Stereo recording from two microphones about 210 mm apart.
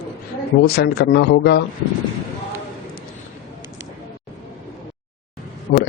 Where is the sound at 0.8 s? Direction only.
50° left (ahead or behind).